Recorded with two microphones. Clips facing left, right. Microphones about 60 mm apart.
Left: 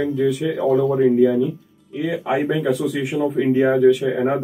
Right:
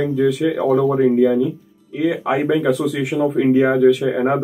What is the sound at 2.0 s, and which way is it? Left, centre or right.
Speech, right.